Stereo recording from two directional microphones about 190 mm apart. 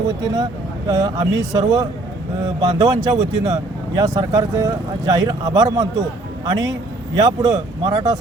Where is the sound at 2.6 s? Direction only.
20° right (ahead or behind).